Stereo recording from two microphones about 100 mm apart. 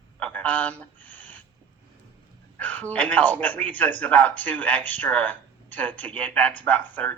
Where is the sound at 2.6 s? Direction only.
15° left (ahead or behind).